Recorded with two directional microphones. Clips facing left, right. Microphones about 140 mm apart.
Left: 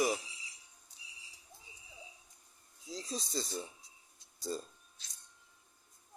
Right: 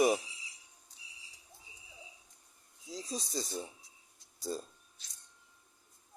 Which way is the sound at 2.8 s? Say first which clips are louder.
Right 1 dB; 10° right (ahead or behind).